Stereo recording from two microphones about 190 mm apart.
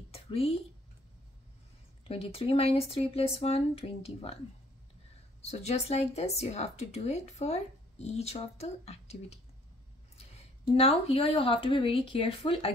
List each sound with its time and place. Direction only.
0.1 s a sound: 30° left (ahead or behind)
2.0 s speech: 30° left (ahead or behind)
5.4 s speech: 35° left (ahead or behind)
10.8 s speech: 30° left (ahead or behind)